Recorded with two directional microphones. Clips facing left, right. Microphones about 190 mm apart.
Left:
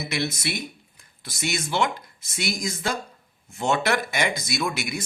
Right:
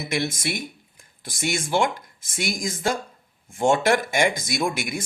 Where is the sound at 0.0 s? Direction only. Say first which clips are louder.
Right 2 dB; 50° right (ahead or behind).